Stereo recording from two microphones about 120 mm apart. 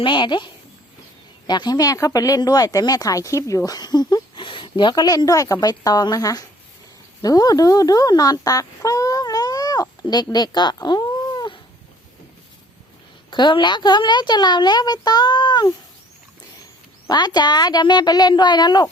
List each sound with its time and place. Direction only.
0.0 s speech: 40° left (ahead or behind)
13.3 s speech: 40° left (ahead or behind)
17.1 s speech: 35° left (ahead or behind)